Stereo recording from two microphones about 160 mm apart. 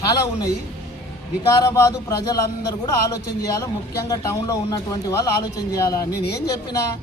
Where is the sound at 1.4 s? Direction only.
20° left (ahead or behind).